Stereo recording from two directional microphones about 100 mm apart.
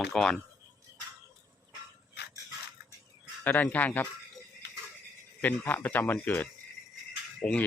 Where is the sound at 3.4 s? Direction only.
15° left (ahead or behind).